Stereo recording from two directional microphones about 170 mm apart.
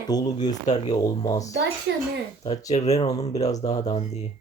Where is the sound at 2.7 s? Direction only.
40° left (ahead or behind).